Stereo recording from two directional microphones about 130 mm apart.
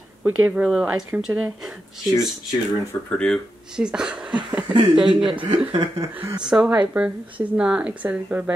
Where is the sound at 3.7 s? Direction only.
5° right (ahead or behind).